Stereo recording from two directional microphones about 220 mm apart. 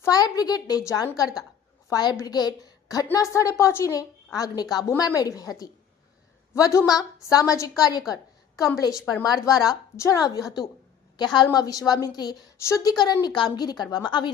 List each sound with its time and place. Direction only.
0.0 s a woman's voice: 15° left (ahead or behind)